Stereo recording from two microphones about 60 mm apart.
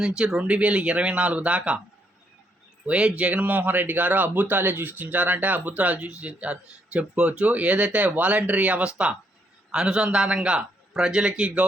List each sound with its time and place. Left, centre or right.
0.0 s speech: centre
2.8 s a man's voice: right